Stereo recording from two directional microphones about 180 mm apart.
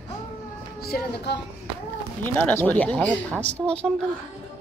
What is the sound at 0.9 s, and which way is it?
Speech, 70° left (ahead or behind).